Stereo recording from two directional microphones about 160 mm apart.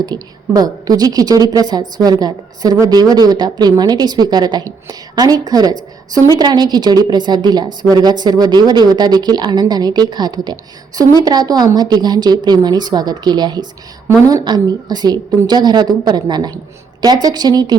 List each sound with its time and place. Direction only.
0.0 s a woman's voice: 25° right (ahead or behind)